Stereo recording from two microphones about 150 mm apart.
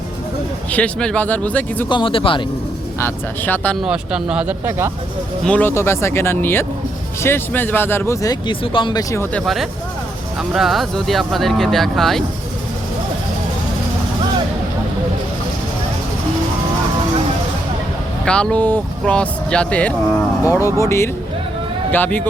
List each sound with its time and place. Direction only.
0.7 s speech: 5° left (ahead or behind)
1.9 s speech: 35° left (ahead or behind)
3.0 s speech: 10° left (ahead or behind)
3.8 s speech: 5° right (ahead or behind)
5.5 s speech: 10° left (ahead or behind)
9.3 s speech: centre (ahead or behind)
18.3 s speech: 5° left (ahead or behind)
20.5 s speech: 20° left (ahead or behind)